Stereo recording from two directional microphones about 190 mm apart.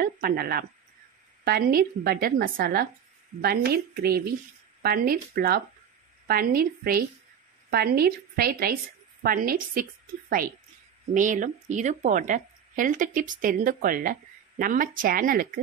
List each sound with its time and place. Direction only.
0.0 s a woman's voice: 50° right (ahead or behind)
11.1 s speech: 40° right (ahead or behind)